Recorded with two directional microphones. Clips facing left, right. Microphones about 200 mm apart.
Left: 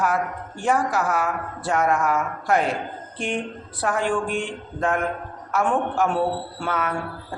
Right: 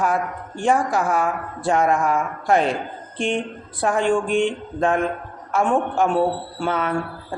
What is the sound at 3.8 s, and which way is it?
Speech, 25° right (ahead or behind).